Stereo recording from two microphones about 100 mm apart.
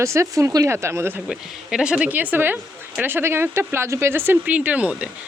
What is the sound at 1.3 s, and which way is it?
Speech, 10° right (ahead or behind).